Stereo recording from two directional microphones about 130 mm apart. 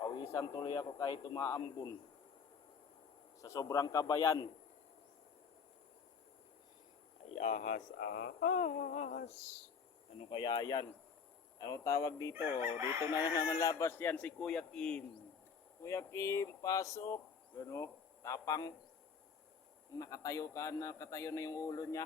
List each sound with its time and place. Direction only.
0.0 s a sound: 35° left (ahead or behind)
0.4 s a man's voice: 35° left (ahead or behind)
3.4 s a man's voice: 25° left (ahead or behind)
7.3 s speech: 65° left (ahead or behind)
10.2 s a man's voice: 40° left (ahead or behind); by 15.0 s 5° left (ahead or behind)
15.8 s a man's voice: 25° left (ahead or behind)
20.0 s a man's voice: 25° left (ahead or behind)